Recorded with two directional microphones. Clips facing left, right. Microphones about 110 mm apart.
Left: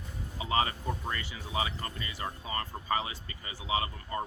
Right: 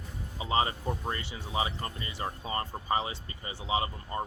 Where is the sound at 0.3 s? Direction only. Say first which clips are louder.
Right 1 dB; 25° right (ahead or behind).